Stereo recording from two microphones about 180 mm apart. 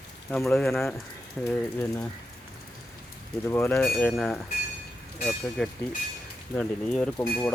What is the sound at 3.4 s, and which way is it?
Speech, 10° left (ahead or behind).